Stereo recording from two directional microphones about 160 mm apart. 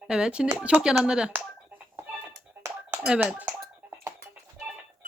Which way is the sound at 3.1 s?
5° right (ahead or behind).